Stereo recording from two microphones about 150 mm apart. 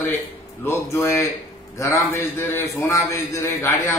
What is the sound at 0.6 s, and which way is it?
A man's voice, 15° left (ahead or behind).